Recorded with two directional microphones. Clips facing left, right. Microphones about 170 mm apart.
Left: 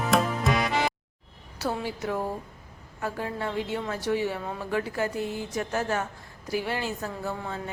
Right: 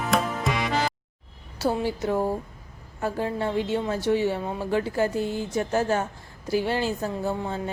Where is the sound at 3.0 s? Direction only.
30° right (ahead or behind).